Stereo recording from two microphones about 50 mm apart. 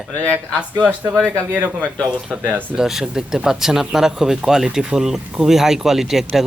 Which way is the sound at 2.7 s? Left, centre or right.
Centre.